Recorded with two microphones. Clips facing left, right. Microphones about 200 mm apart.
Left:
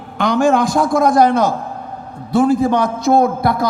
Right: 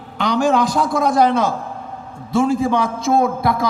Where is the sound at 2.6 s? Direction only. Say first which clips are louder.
Left 3 dB; 40° left (ahead or behind).